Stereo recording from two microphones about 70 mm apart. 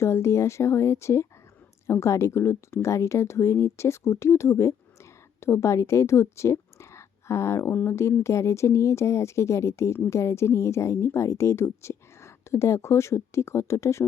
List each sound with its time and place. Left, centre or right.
0.0 s a woman's voice: left